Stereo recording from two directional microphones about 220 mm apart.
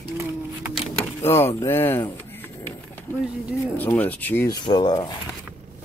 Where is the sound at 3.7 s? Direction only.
10° left (ahead or behind).